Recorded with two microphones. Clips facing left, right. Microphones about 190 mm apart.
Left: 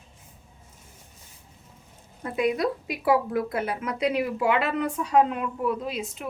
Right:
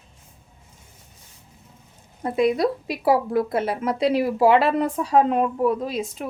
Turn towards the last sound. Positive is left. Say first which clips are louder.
# right 5 dB
turn(degrees=-35)  # may be behind; listen again after turning